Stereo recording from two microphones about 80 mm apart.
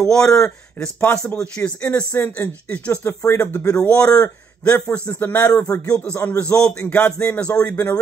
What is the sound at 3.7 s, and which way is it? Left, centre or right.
A man's voice, centre.